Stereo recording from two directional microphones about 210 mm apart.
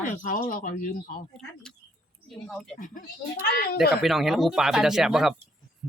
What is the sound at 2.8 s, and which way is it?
Speech, 40° left (ahead or behind).